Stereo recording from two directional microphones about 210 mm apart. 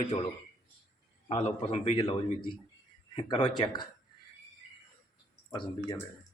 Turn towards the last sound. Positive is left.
turn(degrees=20)  # may be behind; listen again after turning